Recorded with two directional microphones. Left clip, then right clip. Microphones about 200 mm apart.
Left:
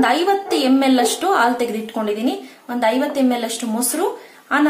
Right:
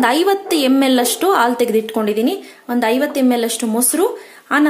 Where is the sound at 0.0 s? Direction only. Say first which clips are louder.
Right 2 dB; 45° right (ahead or behind).